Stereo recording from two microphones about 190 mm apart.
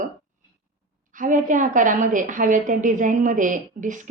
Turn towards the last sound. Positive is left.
turn(degrees=-45)  # may be behind; listen again after turning